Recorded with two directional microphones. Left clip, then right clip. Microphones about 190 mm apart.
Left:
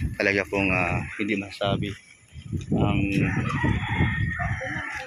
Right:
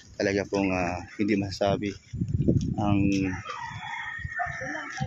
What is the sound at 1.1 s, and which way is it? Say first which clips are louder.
Speech: even; 30° right (ahead or behind).